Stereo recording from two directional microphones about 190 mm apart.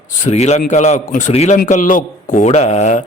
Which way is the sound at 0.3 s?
35° left (ahead or behind).